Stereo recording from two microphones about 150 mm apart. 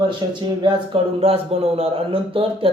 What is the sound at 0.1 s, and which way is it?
A man's voice, 30° right (ahead or behind).